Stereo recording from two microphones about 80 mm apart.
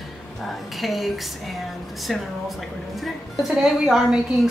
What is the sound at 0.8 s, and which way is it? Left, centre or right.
Speech, centre.